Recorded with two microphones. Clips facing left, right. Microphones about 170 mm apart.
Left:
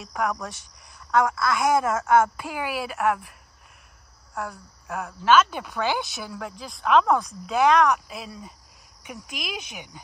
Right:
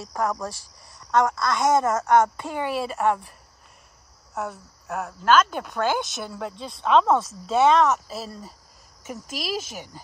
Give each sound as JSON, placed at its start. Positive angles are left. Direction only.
{"t": 1.1, "sound": "speech", "side_deg": 0}
{"t": 2.3, "sound": "speech", "side_deg": -25}
{"t": 2.9, "sound": "speech", "side_deg": 0}
{"t": 4.4, "sound": "speech", "side_deg": 0}
{"t": 9.0, "sound": "speech", "side_deg": -40}